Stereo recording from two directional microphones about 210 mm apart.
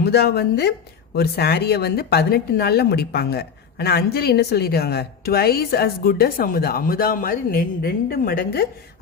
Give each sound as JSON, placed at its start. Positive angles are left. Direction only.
{"t": 0.0, "sound": "speech", "side_deg": 50}